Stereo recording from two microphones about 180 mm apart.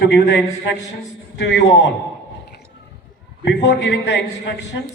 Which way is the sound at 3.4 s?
75° left (ahead or behind).